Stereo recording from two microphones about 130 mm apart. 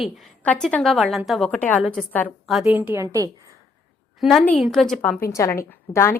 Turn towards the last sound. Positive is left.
turn(degrees=20)  # may be behind; listen again after turning